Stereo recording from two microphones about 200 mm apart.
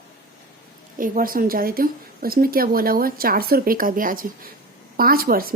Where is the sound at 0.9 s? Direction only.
45° right (ahead or behind).